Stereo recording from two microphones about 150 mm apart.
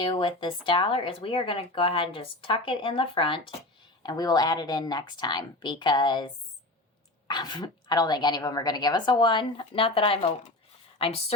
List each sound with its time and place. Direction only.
0.0 s speech: 30° left (ahead or behind)